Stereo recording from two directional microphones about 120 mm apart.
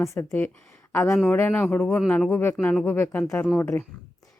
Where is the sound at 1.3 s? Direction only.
15° left (ahead or behind).